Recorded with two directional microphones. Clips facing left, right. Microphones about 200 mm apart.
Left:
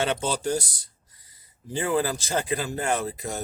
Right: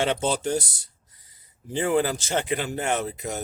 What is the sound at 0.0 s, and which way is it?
Speech, 25° right (ahead or behind).